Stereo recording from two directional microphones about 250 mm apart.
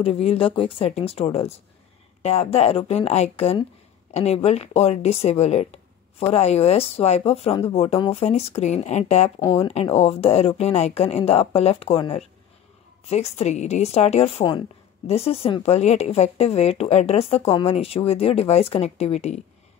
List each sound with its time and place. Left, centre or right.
0.0 s a woman's voice: left
9.4 s a woman's voice: centre